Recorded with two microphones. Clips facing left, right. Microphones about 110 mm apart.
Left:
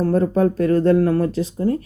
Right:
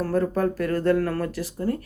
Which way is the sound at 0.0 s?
25° left (ahead or behind).